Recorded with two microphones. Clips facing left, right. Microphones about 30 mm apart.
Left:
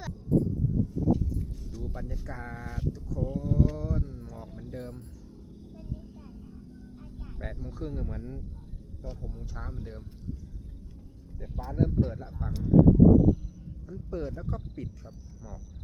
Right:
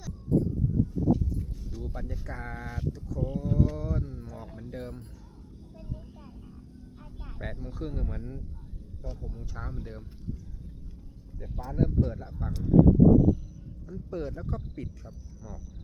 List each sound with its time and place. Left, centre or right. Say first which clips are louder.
0.3 s a sound: even; right
0.9 s a sound: right 1 dB; centre
2.7 s speech: left 3 dB; centre
3.2 s speech: right 1 dB; centre
3.6 s speech: even; centre
5.7 s vehicle: even; centre
7.3 s speech: right 1 dB; centre
8.2 s speech: even; centre
11.3 s speech: even; centre